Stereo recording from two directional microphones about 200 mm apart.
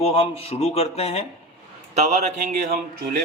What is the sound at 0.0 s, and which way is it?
Speech, 30° left (ahead or behind).